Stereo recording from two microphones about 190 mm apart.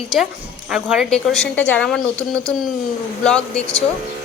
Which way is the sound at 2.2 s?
15° right (ahead or behind).